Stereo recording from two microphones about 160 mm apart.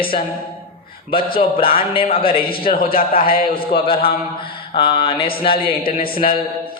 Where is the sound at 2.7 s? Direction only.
65° left (ahead or behind).